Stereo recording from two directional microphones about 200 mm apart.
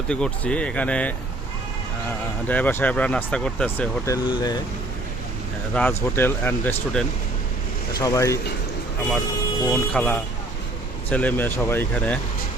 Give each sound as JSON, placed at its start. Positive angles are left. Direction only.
{"t": 0.1, "sound": "speech", "side_deg": 5}
{"t": 2.5, "sound": "speech", "side_deg": 10}
{"t": 4.0, "sound": "speech", "side_deg": 20}
{"t": 5.7, "sound": "speech", "side_deg": 10}
{"t": 7.9, "sound": "speech", "side_deg": 15}
{"t": 9.7, "sound": "speech", "side_deg": 5}